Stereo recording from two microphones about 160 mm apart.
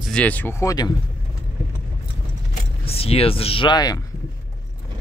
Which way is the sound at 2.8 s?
35° left (ahead or behind).